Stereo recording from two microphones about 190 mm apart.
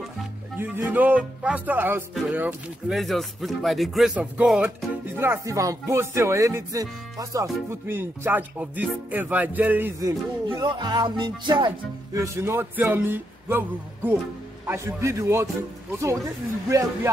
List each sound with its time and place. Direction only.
0.6 s music: 10° right (ahead or behind)
16.6 s music: 15° right (ahead or behind)